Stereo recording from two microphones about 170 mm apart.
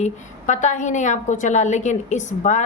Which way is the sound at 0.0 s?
45° left (ahead or behind).